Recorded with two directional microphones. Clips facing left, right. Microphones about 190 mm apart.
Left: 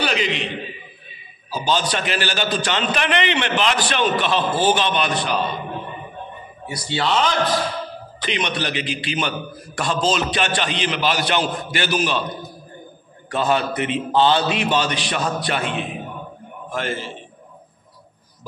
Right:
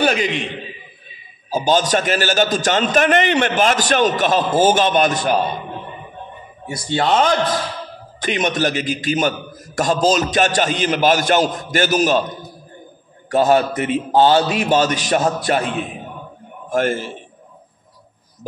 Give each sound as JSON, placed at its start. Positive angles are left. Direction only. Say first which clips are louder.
{"t": 0.0, "sound": "a man's voice", "louder": "right 4 dB", "side_deg": -45}
{"t": 1.5, "sound": "a man's voice", "louder": "right 5 dB", "side_deg": -45}
{"t": 6.7, "sound": "a man's voice", "louder": "right 4 dB", "side_deg": -50}
{"t": 13.3, "sound": "a man's voice", "louder": "right 6 dB", "side_deg": -45}